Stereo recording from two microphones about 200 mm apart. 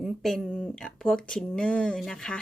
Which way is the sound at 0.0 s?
Centre (ahead or behind).